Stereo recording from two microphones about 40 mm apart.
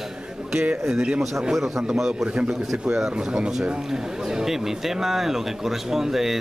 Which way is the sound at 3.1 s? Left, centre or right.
Centre.